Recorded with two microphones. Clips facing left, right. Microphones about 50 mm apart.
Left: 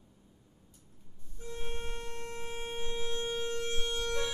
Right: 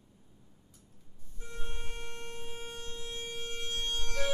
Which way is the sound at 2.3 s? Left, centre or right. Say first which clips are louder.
Left 4 dB; left.